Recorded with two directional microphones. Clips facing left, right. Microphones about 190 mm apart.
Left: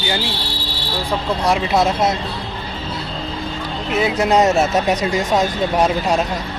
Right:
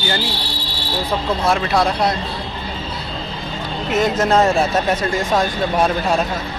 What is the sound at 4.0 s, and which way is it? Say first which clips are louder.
Speech: even; 15° left (ahead or behind).